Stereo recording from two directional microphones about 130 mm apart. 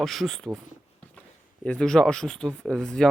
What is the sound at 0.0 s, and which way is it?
Speech, centre (ahead or behind).